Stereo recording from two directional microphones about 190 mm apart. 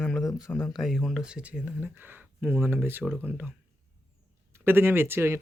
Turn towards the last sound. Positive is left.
turn(degrees=-15)  # may be behind; listen again after turning